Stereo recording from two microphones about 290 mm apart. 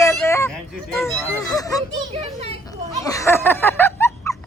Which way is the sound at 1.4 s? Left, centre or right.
Centre.